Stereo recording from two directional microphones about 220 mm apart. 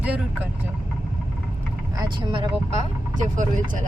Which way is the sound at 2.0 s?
20° right (ahead or behind).